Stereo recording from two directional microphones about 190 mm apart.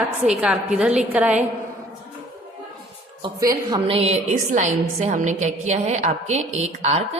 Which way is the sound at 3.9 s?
30° right (ahead or behind).